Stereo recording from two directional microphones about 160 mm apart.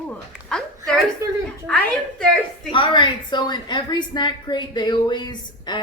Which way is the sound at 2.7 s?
30° left (ahead or behind).